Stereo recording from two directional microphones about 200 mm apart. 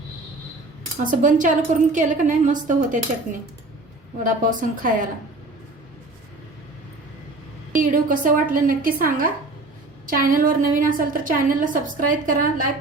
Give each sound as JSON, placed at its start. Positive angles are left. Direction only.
{"t": 0.9, "sound": "a woman's voice", "side_deg": -40}
{"t": 4.2, "sound": "a woman's voice", "side_deg": -40}
{"t": 7.8, "sound": "a woman's voice", "side_deg": -45}